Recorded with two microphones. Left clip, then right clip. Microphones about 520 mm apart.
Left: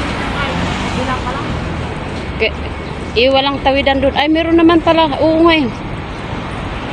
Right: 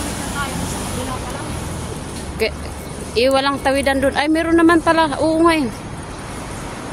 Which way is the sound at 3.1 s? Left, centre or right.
Right.